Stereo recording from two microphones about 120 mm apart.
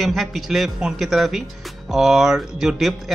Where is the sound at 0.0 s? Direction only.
Centre (ahead or behind).